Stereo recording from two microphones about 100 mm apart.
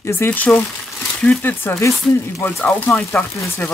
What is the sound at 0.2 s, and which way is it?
Speech, 15° left (ahead or behind).